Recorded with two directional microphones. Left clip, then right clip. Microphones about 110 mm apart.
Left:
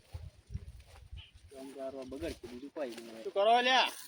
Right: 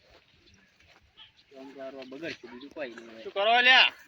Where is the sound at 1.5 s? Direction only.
Centre (ahead or behind).